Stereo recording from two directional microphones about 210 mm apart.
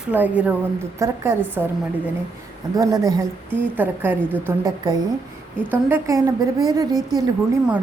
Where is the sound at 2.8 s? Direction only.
15° right (ahead or behind).